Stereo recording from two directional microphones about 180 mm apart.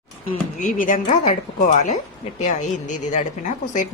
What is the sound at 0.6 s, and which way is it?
Speech, 45° left (ahead or behind).